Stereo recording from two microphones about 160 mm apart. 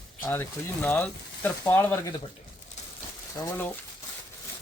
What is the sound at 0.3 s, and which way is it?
Speech, 10° left (ahead or behind).